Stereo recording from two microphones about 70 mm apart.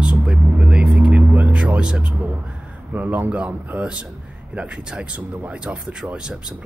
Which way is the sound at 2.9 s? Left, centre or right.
Right.